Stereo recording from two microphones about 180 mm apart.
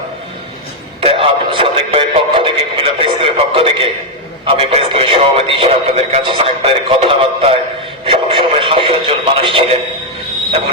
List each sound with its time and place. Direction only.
1.0 s speech: 30° right (ahead or behind)